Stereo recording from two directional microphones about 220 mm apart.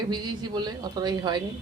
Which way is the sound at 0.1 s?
20° right (ahead or behind).